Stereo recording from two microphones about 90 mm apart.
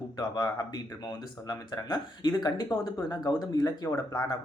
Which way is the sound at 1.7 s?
55° left (ahead or behind).